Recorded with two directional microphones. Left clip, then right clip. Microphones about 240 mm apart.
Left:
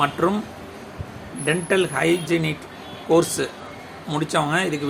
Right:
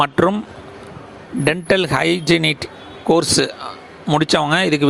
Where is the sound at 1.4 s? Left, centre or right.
Right.